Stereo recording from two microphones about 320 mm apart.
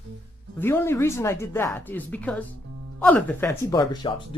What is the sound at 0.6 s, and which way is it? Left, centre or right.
A woman's voice, centre.